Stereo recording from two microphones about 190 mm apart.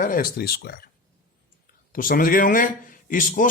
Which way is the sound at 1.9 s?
50° left (ahead or behind).